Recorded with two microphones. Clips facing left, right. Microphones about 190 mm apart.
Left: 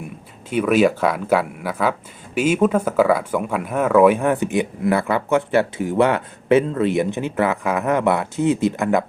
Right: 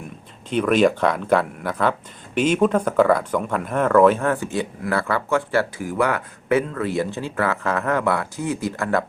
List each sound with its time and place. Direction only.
0.5 s speech: 5° left (ahead or behind)